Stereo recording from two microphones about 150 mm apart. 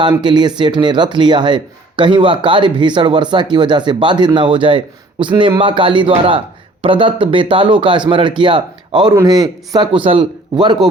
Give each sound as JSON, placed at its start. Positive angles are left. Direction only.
{"t": 0.0, "sound": "speech", "side_deg": -30}